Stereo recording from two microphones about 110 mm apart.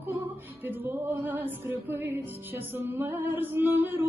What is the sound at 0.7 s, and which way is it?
Music, 20° right (ahead or behind).